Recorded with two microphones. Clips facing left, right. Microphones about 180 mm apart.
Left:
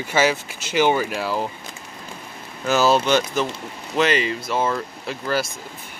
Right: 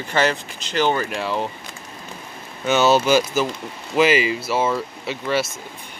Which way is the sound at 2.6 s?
Centre (ahead or behind).